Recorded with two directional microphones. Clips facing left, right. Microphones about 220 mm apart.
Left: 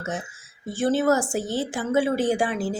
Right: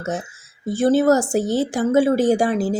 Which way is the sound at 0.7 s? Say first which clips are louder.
Right 5 dB; 40° right (ahead or behind).